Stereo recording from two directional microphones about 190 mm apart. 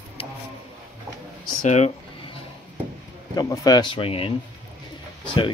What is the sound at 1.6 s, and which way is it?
Speech, 40° left (ahead or behind).